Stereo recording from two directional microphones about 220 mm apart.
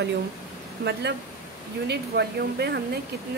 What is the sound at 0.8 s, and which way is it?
A woman's voice, 45° right (ahead or behind).